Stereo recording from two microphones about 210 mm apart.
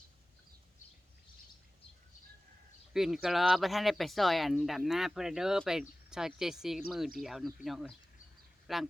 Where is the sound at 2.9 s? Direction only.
Centre (ahead or behind).